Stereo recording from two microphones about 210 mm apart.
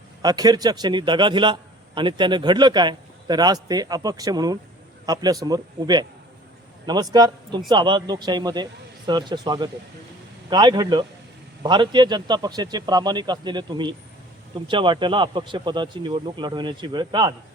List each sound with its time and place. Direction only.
0.2 s a man's voice: 20° right (ahead or behind)